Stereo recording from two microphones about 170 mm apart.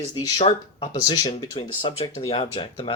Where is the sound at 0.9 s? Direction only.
25° left (ahead or behind).